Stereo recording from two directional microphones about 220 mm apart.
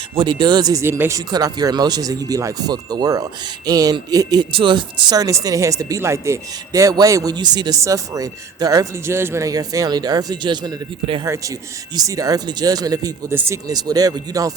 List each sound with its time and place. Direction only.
0.2 s speech: 20° right (ahead or behind)